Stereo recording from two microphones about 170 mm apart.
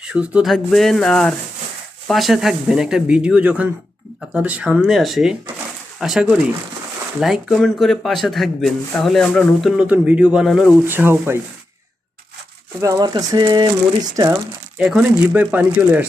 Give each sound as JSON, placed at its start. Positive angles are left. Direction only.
{"t": 0.0, "sound": "a man's voice", "side_deg": -5}
{"t": 10.8, "sound": "speech", "side_deg": -15}
{"t": 12.8, "sound": "speech", "side_deg": -20}
{"t": 14.8, "sound": "speech", "side_deg": -5}